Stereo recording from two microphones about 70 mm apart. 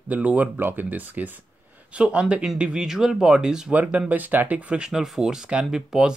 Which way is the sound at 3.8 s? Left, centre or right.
Right.